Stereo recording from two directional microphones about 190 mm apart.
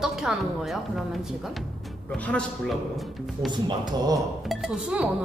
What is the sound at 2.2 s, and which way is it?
Speech, 5° left (ahead or behind).